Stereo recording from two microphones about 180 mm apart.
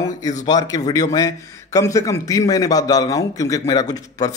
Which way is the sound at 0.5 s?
20° left (ahead or behind).